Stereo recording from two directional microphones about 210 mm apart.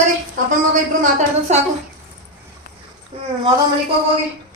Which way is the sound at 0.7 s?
35° right (ahead or behind).